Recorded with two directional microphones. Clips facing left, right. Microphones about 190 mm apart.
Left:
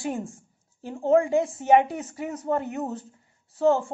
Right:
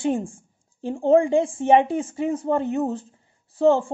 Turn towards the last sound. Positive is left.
turn(degrees=-30)  # may be behind; listen again after turning